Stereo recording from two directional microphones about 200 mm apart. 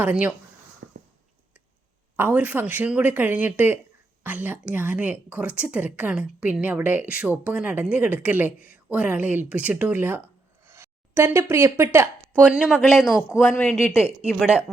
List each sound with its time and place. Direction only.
0.0 s speech: 5° right (ahead or behind)
0.8 s a sound: 55° right (ahead or behind)
2.1 s speech: 10° right (ahead or behind); by 14.1 s 10° left (ahead or behind)